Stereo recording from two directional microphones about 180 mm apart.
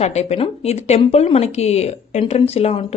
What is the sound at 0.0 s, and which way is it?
Speech, 35° left (ahead or behind).